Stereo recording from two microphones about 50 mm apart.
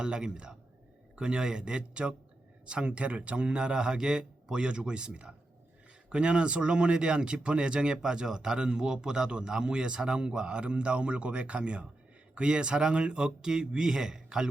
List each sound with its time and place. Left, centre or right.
0.0 s a man's voice: centre